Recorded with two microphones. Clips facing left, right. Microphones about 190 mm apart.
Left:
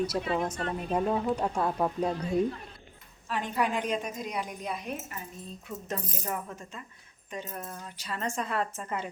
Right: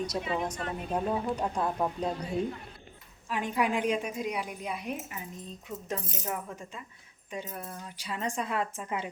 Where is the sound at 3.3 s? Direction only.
10° right (ahead or behind).